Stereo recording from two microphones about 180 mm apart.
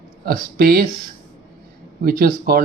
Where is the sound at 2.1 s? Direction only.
55° right (ahead or behind).